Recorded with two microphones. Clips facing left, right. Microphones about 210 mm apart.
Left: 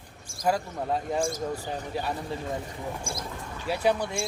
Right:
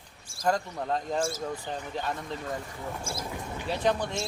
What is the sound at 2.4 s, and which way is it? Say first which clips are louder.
Speech: left 2 dB; 20° left (ahead or behind).